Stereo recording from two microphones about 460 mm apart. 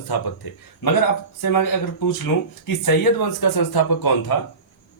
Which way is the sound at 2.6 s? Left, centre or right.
Left.